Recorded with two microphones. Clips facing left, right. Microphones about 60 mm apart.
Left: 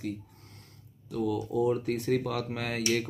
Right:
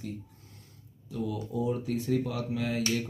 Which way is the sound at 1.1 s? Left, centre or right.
Left.